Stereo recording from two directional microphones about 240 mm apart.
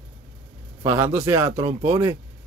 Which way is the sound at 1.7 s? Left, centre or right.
Right.